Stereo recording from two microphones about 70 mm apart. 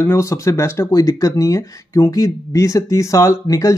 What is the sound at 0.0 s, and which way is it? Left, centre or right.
Speech, left.